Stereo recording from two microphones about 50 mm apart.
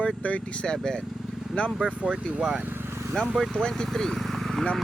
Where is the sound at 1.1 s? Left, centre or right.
Centre.